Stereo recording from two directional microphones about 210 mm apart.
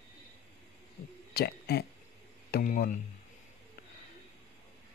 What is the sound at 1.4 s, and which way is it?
Speech, 50° left (ahead or behind).